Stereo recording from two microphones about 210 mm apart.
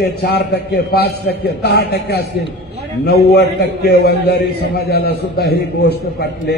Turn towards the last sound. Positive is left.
turn(degrees=50)  # may be behind; listen again after turning